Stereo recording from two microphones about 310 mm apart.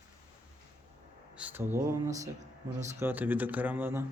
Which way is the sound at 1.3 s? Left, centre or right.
Centre.